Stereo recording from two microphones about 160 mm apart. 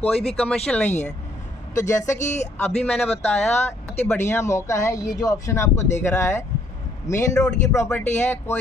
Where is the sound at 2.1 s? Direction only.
45° left (ahead or behind).